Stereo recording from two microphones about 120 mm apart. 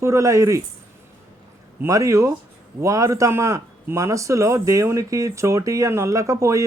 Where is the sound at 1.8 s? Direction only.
25° right (ahead or behind).